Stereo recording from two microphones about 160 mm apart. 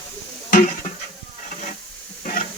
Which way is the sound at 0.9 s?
55° left (ahead or behind).